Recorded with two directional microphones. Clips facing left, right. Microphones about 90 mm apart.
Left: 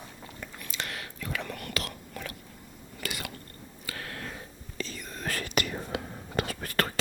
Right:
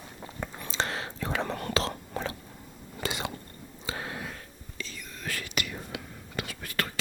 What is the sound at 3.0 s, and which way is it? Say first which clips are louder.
Biting: right 5 dB; 25° right (ahead or behind).